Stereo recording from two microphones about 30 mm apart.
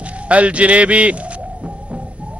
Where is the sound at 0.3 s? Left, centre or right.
Right.